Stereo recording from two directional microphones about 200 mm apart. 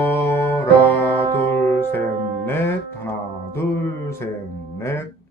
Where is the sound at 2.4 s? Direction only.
10° left (ahead or behind).